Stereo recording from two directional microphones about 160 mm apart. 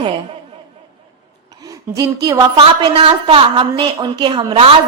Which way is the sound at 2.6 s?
35° right (ahead or behind).